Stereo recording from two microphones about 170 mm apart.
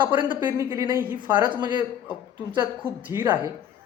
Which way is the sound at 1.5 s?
25° right (ahead or behind).